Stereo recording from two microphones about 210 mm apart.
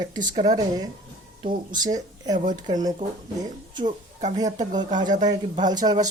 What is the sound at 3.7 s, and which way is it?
Speech, 20° right (ahead or behind).